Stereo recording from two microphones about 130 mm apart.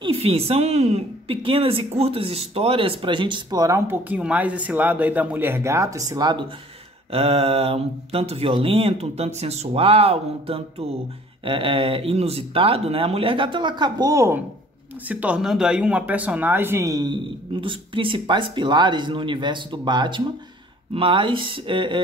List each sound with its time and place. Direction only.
0.0 s a woman's voice: 45° right (ahead or behind)
7.1 s speech: 50° right (ahead or behind); by 14.4 s 20° right (ahead or behind)
15.0 s a woman's voice: 10° right (ahead or behind); by 22.0 s 40° right (ahead or behind)